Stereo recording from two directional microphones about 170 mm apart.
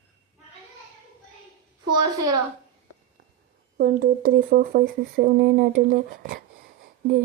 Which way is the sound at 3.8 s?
70° right (ahead or behind).